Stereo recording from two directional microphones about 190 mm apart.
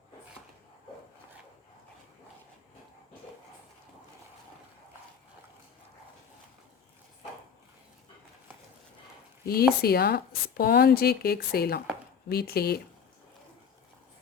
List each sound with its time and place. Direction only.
9.5 s speech: 55° left (ahead or behind)